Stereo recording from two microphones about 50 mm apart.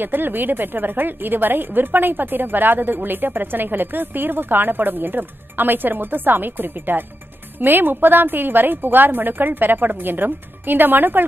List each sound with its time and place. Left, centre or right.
0.0 s a woman's voice: right